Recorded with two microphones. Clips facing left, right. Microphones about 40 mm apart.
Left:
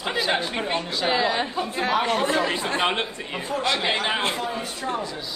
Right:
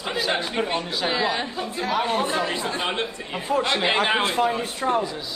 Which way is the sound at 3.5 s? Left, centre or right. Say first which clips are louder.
Right 3 dB; right.